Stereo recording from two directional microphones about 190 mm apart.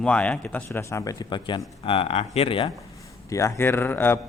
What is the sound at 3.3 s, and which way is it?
Speech, 15° left (ahead or behind).